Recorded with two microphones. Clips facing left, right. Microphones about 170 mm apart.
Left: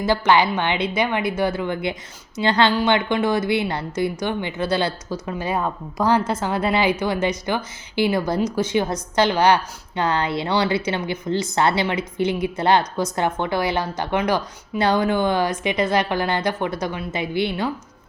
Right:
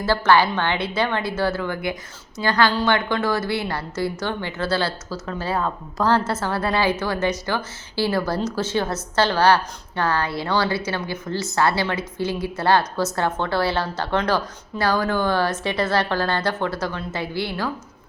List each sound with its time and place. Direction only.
0.0 s a woman's voice: 15° left (ahead or behind)